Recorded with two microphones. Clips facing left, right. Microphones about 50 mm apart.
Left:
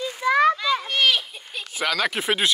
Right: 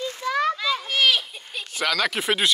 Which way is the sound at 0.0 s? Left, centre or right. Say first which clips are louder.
Left 4 dB; centre.